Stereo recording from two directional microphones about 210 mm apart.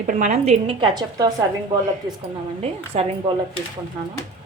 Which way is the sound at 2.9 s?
30° right (ahead or behind).